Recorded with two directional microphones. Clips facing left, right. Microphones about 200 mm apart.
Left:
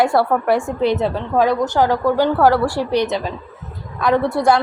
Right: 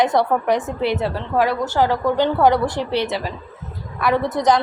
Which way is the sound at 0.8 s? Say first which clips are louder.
Left 3 dB; 20° left (ahead or behind).